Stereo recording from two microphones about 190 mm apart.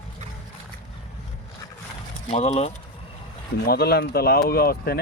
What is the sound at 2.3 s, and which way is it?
Speech, 35° left (ahead or behind).